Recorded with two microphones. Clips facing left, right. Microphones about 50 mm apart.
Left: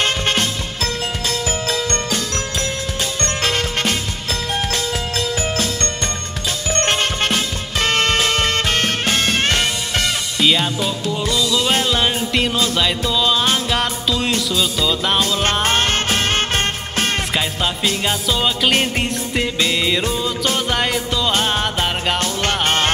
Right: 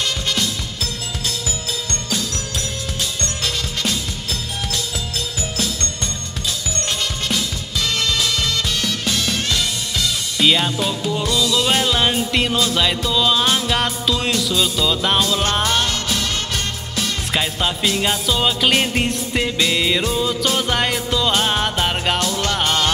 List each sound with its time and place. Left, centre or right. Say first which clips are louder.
0.0 s music: left 4 dB; left
3.4 s music: left 4 dB; left
6.7 s music: left 10 dB; left
10.4 s music: even; centre
15.6 s music: left 2 dB; left
17.3 s music: even; centre
22.2 s music: left 1 dB; left